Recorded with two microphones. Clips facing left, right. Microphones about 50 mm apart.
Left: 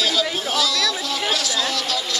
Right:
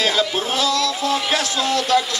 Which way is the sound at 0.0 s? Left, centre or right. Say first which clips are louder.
Right 2 dB; right.